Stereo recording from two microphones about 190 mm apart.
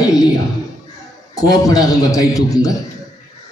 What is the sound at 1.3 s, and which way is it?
Music, 20° left (ahead or behind).